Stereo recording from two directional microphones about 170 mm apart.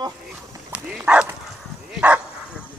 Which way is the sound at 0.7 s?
5° right (ahead or behind).